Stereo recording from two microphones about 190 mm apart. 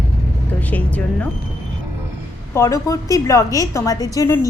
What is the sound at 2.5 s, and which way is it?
A woman's voice, 15° left (ahead or behind).